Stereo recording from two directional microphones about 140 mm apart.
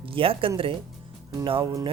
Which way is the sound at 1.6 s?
25° right (ahead or behind).